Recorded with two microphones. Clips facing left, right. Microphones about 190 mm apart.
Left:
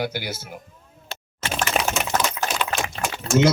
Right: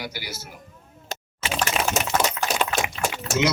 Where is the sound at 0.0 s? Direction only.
55° left (ahead or behind).